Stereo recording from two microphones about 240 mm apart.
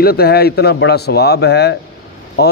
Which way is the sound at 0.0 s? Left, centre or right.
Left.